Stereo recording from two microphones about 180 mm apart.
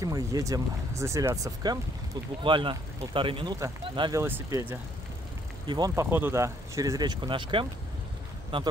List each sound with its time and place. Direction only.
0.0 s speech: 20° right (ahead or behind)
4.2 s speech: 15° right (ahead or behind)